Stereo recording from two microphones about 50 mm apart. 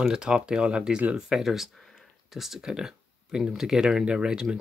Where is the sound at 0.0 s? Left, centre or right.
Centre.